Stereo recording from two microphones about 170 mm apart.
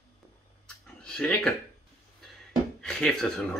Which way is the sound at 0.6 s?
5° left (ahead or behind).